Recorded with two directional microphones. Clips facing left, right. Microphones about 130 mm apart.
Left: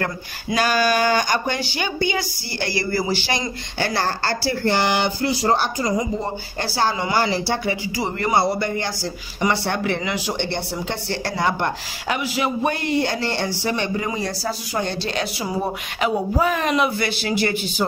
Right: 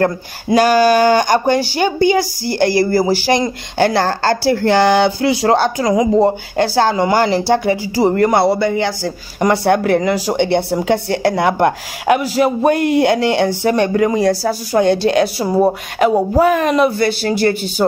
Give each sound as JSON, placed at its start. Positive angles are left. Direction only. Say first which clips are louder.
{"t": 0.0, "sound": "speech", "louder": "right 10 dB", "side_deg": -45}
{"t": 3.9, "sound": "a woman's voice", "louder": "right 7 dB", "side_deg": -90}
{"t": 4.3, "sound": "speech", "louder": "right 10 dB", "side_deg": -75}
{"t": 6.9, "sound": "speech", "louder": "right 7 dB", "side_deg": -50}
{"t": 8.1, "sound": "speech", "louder": "right 6 dB", "side_deg": -65}
{"t": 10.4, "sound": "speech", "louder": "right 11 dB", "side_deg": -55}
{"t": 12.2, "sound": "speech", "louder": "right 8 dB", "side_deg": -40}
{"t": 12.9, "sound": "speech", "louder": "right 9 dB", "side_deg": -60}
{"t": 15.3, "sound": "speech", "louder": "right 11 dB", "side_deg": -35}
{"t": 16.3, "sound": "speech", "louder": "right 7 dB", "side_deg": -50}